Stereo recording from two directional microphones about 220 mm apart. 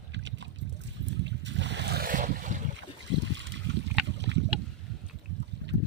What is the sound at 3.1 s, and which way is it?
Trickle, 55° right (ahead or behind).